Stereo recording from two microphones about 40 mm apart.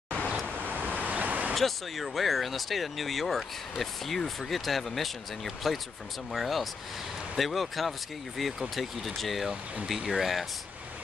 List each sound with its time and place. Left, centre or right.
0.5 s vehicle: right
1.5 s speech: centre